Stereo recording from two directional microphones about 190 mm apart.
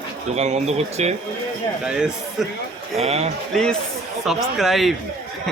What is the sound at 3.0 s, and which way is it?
Speech, 35° right (ahead or behind).